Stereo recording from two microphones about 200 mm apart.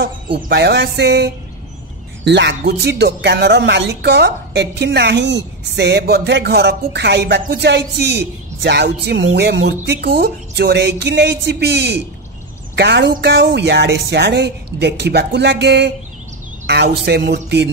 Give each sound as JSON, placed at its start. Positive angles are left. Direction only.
{"t": 0.0, "sound": "speech", "side_deg": -55}